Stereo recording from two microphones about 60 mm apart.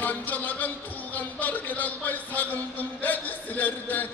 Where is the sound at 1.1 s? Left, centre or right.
Left.